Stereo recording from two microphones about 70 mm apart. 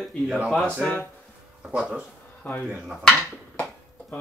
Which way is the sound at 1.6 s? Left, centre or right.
Centre.